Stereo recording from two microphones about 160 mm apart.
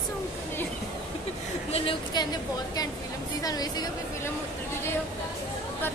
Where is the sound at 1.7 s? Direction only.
30° left (ahead or behind).